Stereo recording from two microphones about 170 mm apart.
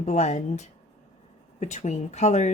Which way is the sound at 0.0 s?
45° left (ahead or behind).